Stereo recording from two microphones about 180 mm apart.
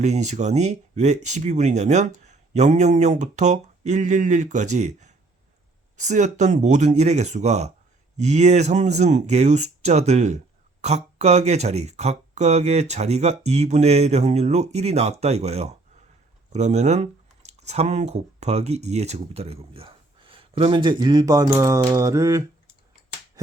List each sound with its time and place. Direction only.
0.0 s speech: 40° right (ahead or behind); by 22.4 s 20° right (ahead or behind)